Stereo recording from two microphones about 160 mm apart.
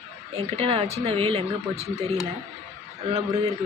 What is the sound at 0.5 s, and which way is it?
Speech, 35° right (ahead or behind).